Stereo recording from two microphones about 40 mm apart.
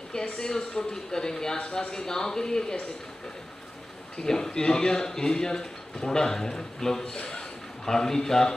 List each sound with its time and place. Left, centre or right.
0.1 s speech: centre
4.2 s speech: centre